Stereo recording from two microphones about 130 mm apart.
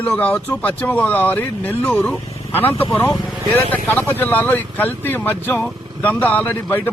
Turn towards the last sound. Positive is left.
turn(degrees=15)  # may be behind; listen again after turning